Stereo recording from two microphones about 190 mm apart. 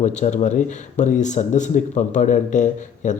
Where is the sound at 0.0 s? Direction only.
40° left (ahead or behind).